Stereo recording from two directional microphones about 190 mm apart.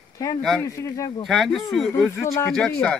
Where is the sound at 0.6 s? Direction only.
15° left (ahead or behind).